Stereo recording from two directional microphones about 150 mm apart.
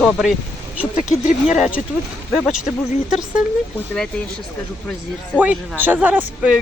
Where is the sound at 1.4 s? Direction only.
5° right (ahead or behind).